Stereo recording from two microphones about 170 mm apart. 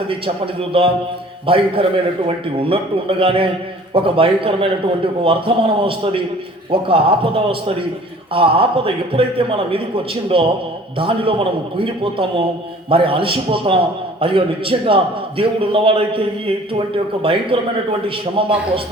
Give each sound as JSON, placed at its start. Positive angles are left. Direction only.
{"t": 0.7, "sound": "a man's voice", "side_deg": -35}